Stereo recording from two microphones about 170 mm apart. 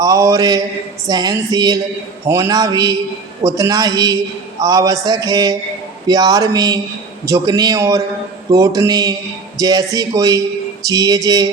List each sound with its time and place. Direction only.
0.0 s a man's voice: 20° right (ahead or behind)